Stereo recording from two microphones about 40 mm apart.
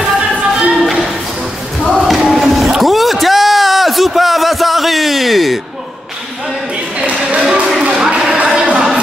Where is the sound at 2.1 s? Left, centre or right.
Centre.